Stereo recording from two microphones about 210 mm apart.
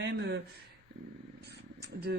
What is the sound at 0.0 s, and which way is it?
Speech, 55° right (ahead or behind).